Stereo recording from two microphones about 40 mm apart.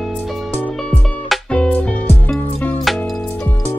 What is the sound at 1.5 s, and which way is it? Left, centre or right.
Music, left.